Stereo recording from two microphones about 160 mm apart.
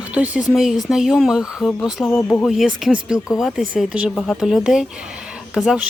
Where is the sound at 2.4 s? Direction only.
Centre (ahead or behind).